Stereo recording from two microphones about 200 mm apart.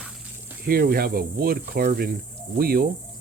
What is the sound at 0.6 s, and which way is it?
Speech, 50° right (ahead or behind).